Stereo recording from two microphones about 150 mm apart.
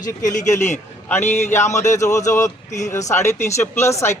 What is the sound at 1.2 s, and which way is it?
Speech, 50° left (ahead or behind).